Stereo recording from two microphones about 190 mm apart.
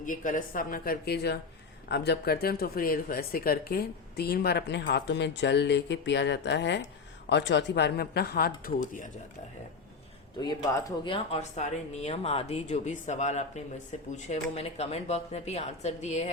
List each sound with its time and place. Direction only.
0.0 s a woman's voice: 45° left (ahead or behind)
10.4 s speech: 20° left (ahead or behind); by 16.3 s 35° left (ahead or behind)